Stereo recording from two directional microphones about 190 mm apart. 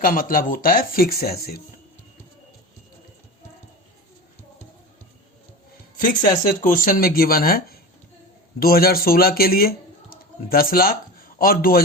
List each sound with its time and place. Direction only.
0.0 s speech: 45° left (ahead or behind)
6.2 s speech: 45° left (ahead or behind)